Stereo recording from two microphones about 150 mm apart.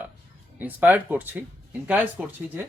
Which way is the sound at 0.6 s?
10° right (ahead or behind).